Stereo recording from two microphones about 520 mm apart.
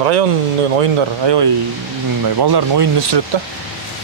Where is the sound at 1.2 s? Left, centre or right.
Right.